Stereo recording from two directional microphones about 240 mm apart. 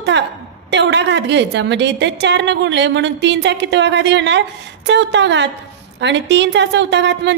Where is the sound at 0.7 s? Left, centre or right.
Right.